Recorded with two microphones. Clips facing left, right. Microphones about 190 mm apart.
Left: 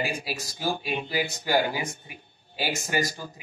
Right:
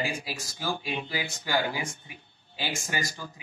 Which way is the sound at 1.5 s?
40° left (ahead or behind).